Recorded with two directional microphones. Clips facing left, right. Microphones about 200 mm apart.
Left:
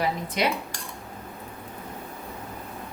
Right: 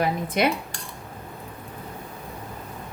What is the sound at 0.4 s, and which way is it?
Speech, 55° right (ahead or behind).